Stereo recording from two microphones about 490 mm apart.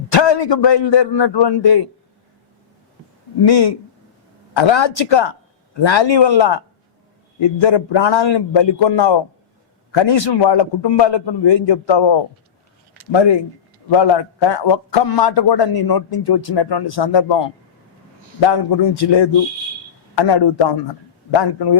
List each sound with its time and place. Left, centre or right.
0.1 s a man's voice: left
3.4 s a man's voice: left
13.9 s a man's voice: left